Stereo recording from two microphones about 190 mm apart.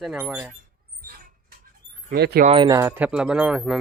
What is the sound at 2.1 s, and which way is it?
Speech, 55° right (ahead or behind).